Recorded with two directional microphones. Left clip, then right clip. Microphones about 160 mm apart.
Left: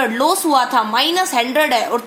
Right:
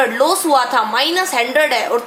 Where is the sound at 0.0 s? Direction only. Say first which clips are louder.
Right 2 dB; 25° left (ahead or behind).